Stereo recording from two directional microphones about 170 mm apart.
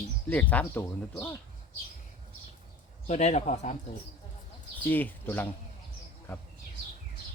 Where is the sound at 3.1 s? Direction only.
40° left (ahead or behind).